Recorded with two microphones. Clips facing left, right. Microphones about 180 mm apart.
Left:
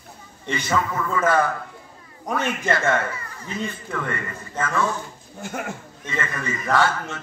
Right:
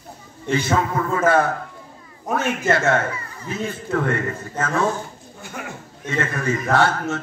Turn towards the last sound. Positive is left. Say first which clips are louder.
# right 2 dB
turn(degrees=-50)  # may be behind; listen again after turning